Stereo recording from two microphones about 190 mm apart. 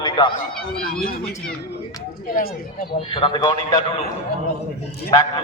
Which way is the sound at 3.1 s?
25° left (ahead or behind).